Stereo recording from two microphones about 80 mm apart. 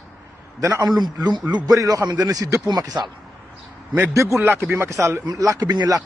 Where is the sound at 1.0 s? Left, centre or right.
Right.